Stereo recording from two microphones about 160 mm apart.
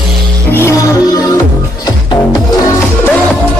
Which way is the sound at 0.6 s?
20° left (ahead or behind).